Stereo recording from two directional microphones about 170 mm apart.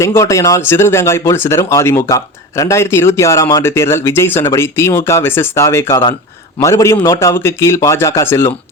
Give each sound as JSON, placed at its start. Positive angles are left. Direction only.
{"t": 0.0, "sound": "speech", "side_deg": 20}